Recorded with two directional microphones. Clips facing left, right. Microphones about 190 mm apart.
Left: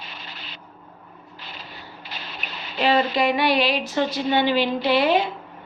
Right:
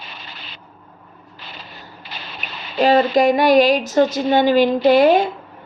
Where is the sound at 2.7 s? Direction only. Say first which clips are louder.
Right 6 dB; 45° right (ahead or behind).